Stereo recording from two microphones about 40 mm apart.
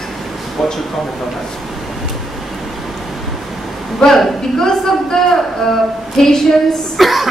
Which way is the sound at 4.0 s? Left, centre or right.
Centre.